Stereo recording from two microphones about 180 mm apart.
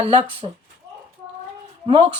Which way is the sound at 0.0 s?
35° right (ahead or behind).